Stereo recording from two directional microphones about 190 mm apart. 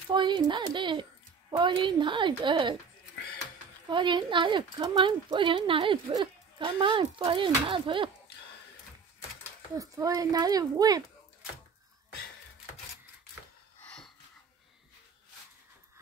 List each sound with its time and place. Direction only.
0.1 s speech: 25° right (ahead or behind)
3.9 s speech: 25° right (ahead or behind)
9.8 s speech: 15° right (ahead or behind)
13.8 s wheeze: 5° left (ahead or behind)